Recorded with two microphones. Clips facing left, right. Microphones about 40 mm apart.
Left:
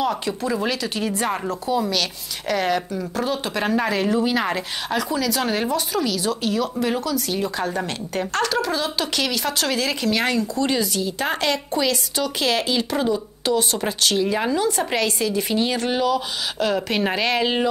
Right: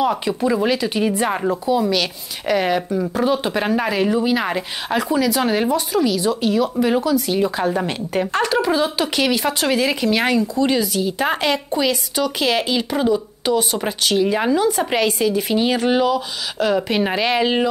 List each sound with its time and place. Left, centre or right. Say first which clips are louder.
0.0 s speech: right 4 dB; centre